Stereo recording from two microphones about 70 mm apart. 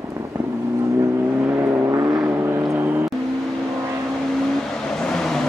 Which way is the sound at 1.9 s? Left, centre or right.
Right.